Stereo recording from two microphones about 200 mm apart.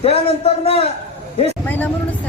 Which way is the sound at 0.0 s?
30° left (ahead or behind).